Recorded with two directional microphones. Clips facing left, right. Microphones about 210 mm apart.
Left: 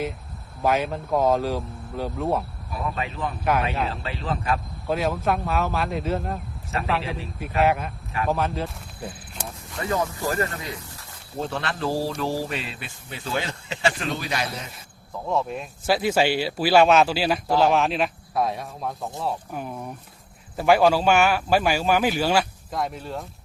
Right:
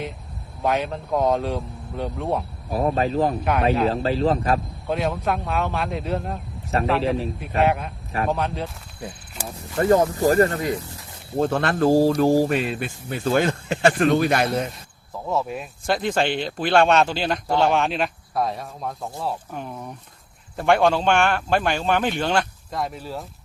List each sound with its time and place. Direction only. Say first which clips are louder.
0.6 s speech: even; centre (ahead or behind)
2.7 s speech: right 9 dB; 40° right (ahead or behind)
3.4 s speech: right 4 dB; centre (ahead or behind)
4.0 s speech: right 8 dB; 35° right (ahead or behind)
4.9 s speech: even; centre (ahead or behind)
9.7 s speech: right 8 dB; 35° right (ahead or behind)
11.3 s speech: right 8 dB; 50° right (ahead or behind)
15.1 s speech: even; 5° right (ahead or behind)